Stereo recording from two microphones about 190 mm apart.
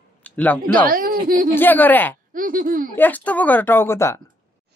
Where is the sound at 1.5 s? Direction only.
10° left (ahead or behind).